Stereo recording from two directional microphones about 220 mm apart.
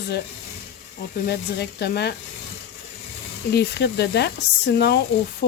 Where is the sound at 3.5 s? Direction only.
50° left (ahead or behind).